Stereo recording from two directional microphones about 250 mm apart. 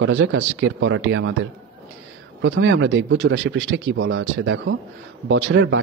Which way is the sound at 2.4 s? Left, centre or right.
Right.